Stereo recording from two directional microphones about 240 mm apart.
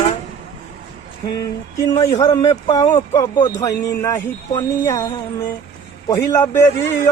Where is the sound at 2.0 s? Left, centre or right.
Centre.